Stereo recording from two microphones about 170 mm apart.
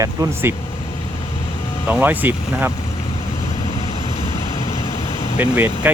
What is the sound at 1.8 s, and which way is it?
Speech, 10° right (ahead or behind).